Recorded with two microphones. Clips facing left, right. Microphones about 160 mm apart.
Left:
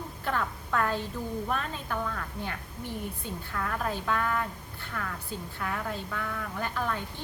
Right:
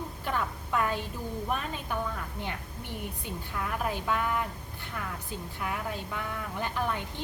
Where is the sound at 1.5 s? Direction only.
15° right (ahead or behind).